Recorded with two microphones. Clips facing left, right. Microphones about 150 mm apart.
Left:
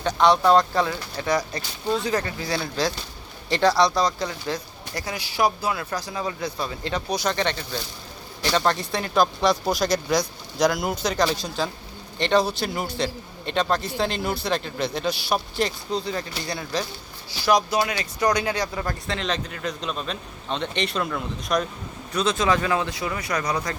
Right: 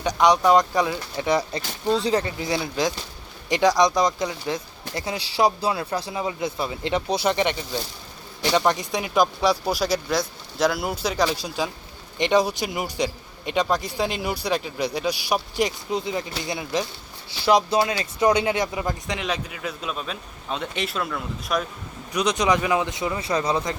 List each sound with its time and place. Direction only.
0.0 s a man's voice: 15° right (ahead or behind)
22.1 s speech: 15° right (ahead or behind)